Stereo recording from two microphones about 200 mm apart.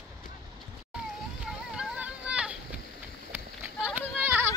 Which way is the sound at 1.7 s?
5° right (ahead or behind).